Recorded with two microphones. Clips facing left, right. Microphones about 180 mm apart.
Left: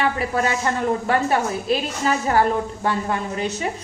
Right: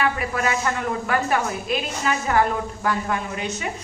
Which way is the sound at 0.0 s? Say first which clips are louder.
Left 2 dB; 30° left (ahead or behind).